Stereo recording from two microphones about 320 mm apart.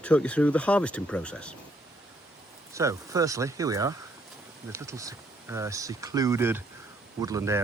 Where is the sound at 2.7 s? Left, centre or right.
Centre.